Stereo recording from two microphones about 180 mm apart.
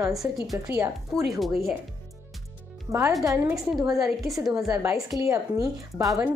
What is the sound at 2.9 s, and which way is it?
Speech, 15° right (ahead or behind).